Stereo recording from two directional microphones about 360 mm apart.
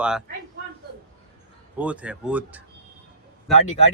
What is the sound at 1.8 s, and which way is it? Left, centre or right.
Speech, centre.